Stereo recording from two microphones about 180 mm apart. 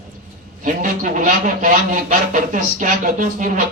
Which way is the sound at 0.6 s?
45° right (ahead or behind).